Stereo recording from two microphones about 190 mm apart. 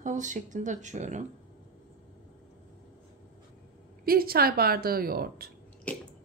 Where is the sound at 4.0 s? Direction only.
50° right (ahead or behind).